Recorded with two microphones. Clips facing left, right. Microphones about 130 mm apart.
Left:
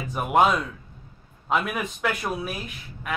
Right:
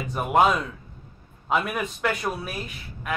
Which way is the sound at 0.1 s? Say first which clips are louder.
Even; centre (ahead or behind).